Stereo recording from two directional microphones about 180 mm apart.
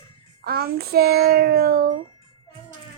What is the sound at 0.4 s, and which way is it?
A child's voice, 55° right (ahead or behind).